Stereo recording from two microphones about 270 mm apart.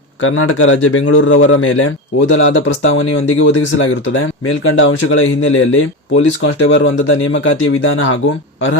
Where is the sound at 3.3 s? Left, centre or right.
Left.